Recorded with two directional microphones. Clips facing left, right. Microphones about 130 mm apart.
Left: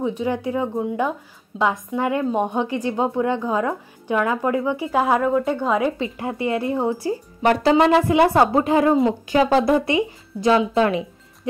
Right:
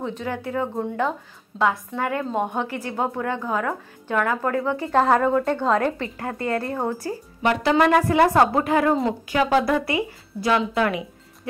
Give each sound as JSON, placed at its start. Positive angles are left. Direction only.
{"t": 0.0, "sound": "a woman's voice", "side_deg": 15}